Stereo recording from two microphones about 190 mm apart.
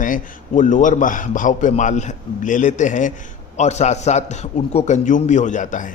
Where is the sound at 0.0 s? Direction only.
45° left (ahead or behind).